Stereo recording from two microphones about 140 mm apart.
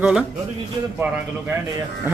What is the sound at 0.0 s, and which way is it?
Speech, 5° right (ahead or behind).